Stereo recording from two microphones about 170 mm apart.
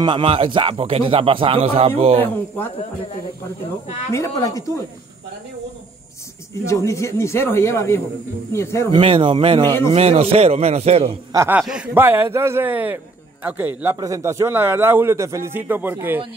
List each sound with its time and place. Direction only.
0.0 s speech: 30° right (ahead or behind)
4.1 s speech: 20° left (ahead or behind)
6.5 s speech: 15° left (ahead or behind)
8.9 s speech: 30° right (ahead or behind)
11.3 s a man's voice: 15° right (ahead or behind)